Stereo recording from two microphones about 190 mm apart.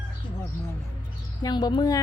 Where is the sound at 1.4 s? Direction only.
20° left (ahead or behind).